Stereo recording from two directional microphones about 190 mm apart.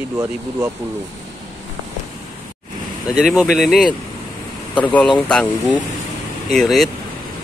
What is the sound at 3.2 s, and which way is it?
Speech, 5° right (ahead or behind).